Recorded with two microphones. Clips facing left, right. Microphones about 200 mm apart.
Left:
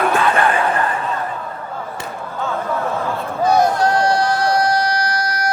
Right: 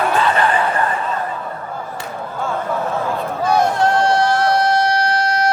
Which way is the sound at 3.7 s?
25° right (ahead or behind).